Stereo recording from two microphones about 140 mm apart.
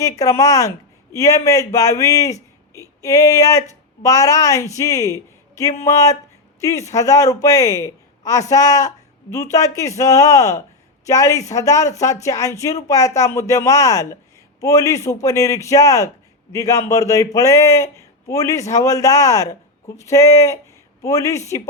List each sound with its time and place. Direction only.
0.0 s a man's voice: 25° left (ahead or behind)